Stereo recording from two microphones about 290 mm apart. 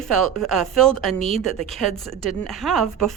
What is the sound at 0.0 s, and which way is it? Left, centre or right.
Speech, centre.